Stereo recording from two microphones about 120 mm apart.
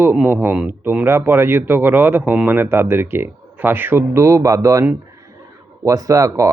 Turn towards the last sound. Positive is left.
turn(degrees=-25)  # may be behind; listen again after turning